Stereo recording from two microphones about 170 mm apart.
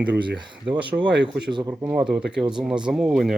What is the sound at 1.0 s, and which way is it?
Speech, 90° right.